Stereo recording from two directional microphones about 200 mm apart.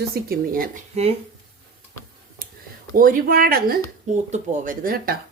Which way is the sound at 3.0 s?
45° right (ahead or behind).